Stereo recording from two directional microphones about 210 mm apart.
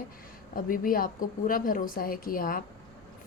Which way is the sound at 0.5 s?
40° left (ahead or behind).